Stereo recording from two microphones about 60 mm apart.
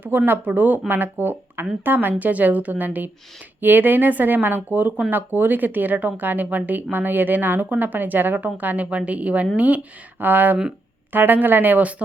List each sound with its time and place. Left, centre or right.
0.0 s speech: right